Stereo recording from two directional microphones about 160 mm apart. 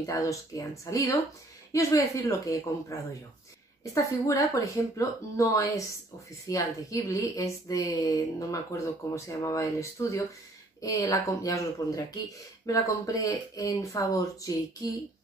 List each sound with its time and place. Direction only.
0.0 s a woman's voice: 20° left (ahead or behind)